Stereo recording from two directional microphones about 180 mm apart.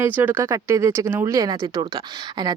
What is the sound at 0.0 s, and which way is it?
Speech, 10° right (ahead or behind).